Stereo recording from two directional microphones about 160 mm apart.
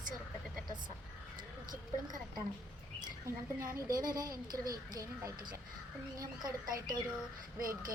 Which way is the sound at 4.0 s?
25° right (ahead or behind).